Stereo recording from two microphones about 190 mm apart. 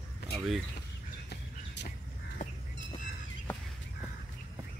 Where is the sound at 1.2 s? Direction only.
60° left (ahead or behind).